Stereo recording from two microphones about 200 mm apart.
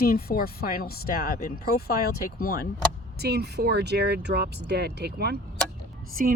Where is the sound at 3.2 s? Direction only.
55° right (ahead or behind).